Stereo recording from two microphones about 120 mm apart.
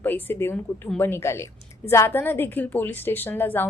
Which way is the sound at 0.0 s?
15° left (ahead or behind).